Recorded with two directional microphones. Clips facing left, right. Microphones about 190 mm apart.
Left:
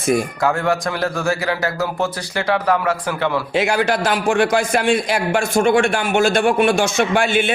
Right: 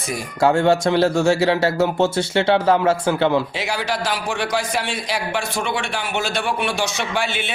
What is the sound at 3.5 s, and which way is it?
A man's voice, 50° left (ahead or behind).